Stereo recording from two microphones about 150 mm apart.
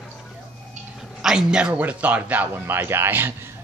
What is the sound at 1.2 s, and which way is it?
Speech, 5° right (ahead or behind).